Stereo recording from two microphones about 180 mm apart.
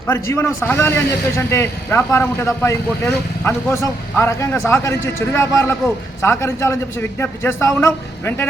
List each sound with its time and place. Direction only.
0.1 s speech: 15° left (ahead or behind)